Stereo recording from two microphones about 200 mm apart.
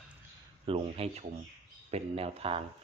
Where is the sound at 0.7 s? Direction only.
30° right (ahead or behind).